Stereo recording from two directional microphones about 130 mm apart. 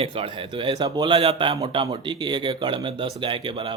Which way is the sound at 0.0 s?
45° right (ahead or behind).